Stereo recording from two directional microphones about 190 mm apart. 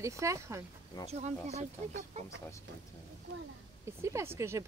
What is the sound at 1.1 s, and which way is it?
Speech, 35° right (ahead or behind).